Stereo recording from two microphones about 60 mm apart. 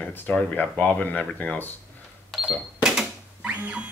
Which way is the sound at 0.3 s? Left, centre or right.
Left.